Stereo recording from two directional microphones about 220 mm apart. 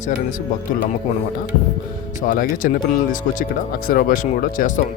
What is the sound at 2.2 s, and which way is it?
Speech, 40° left (ahead or behind).